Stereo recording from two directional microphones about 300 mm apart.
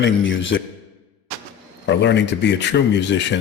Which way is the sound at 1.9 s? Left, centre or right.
Left.